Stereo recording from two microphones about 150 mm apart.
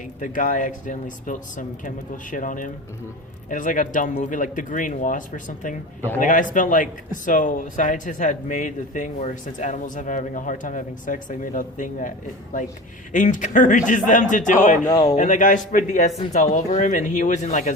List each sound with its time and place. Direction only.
0.2 s a man's voice: 60° left (ahead or behind)
13.1 s a man's voice: 60° left (ahead or behind)